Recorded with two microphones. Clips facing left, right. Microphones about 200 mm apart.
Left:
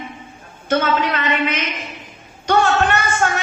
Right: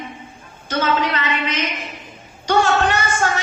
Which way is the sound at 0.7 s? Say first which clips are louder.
Left 2 dB; 55° left (ahead or behind).